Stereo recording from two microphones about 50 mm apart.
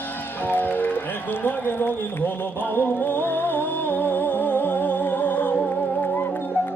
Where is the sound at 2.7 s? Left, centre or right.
Left.